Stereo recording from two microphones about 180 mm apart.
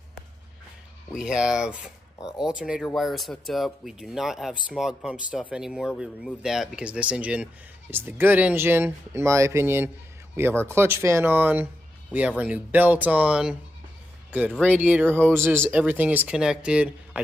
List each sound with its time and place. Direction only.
1.1 s speech: 5° right (ahead or behind)